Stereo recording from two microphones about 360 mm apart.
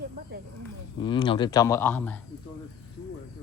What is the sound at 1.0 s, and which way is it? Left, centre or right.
Speech, centre.